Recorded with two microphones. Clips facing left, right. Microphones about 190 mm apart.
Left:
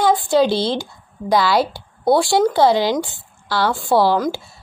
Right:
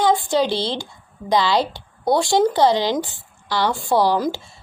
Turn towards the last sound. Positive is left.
turn(degrees=-15)  # may be behind; listen again after turning